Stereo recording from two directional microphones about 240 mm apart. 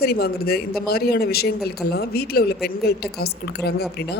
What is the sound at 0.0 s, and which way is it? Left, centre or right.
A man's voice, left.